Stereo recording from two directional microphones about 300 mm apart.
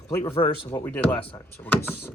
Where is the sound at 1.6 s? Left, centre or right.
Centre.